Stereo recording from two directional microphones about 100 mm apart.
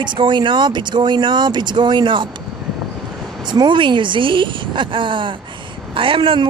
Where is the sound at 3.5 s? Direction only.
55° right (ahead or behind).